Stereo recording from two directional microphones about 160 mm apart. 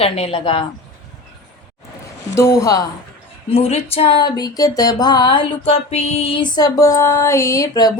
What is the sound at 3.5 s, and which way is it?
Music, 35° left (ahead or behind).